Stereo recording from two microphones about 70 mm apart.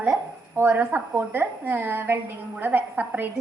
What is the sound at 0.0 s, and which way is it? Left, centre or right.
A woman's voice, right.